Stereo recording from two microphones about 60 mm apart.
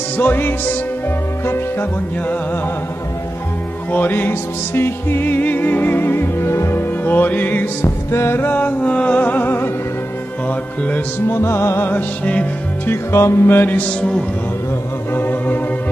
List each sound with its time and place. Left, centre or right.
0.2 s music: left
1.4 s music: left
3.9 s music: left
7.8 s music: left
11.2 s music: left
11.9 s music: left
13.1 s music: left
15.1 s music: left